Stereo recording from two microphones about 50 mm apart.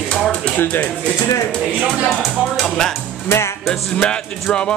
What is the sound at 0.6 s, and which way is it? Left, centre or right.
Speech, left.